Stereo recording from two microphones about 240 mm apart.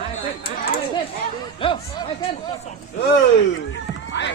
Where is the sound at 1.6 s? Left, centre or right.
Left.